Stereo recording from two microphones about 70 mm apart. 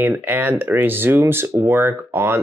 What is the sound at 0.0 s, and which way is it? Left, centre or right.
Speech, right.